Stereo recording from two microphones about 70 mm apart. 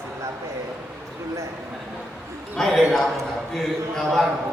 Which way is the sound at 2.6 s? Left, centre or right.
Centre.